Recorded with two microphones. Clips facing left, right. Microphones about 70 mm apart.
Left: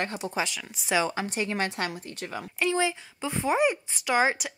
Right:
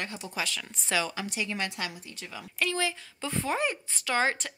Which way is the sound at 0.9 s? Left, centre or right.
Left.